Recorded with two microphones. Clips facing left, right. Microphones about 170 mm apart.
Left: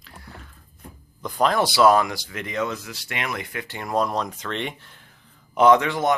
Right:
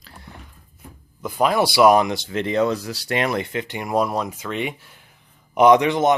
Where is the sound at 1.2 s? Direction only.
10° right (ahead or behind); by 3.6 s 30° right (ahead or behind).